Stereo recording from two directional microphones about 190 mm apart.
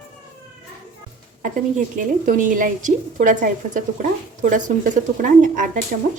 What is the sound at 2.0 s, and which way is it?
A woman's voice, 45° right (ahead or behind).